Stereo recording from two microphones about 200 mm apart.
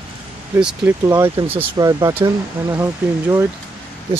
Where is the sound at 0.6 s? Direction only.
5° right (ahead or behind).